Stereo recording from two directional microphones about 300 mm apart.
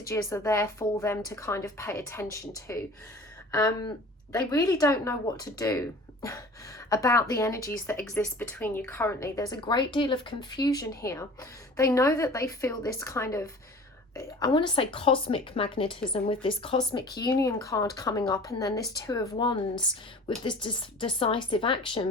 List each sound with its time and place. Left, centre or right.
0.1 s a woman's voice: centre
6.9 s a woman's voice: centre